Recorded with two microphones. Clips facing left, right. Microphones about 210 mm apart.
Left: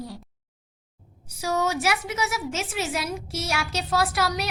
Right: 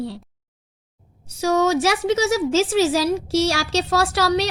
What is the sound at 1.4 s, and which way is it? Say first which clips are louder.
Speech: right 7 dB; 75° right (ahead or behind).